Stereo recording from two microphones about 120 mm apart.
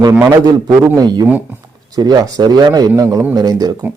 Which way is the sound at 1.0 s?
35° right (ahead or behind).